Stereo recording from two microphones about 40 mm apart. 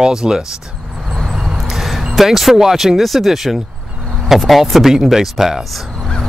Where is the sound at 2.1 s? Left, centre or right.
Centre.